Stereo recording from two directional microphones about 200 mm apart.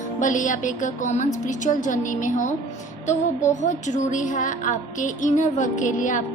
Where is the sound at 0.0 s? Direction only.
40° left (ahead or behind).